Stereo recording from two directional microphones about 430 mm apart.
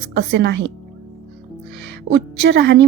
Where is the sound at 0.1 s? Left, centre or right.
Right.